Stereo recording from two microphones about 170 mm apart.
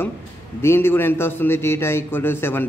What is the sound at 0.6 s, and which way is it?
A man's voice, 15° left (ahead or behind).